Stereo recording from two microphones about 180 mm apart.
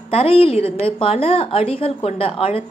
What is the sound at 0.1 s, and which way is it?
A woman's voice, 30° left (ahead or behind).